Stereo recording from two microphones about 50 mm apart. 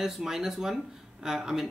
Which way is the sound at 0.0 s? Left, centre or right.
Centre.